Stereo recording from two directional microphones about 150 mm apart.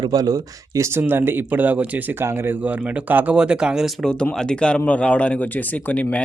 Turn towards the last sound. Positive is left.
turn(degrees=10)  # may be behind; listen again after turning